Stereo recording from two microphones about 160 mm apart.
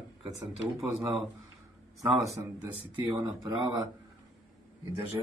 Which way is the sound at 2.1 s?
Centre (ahead or behind).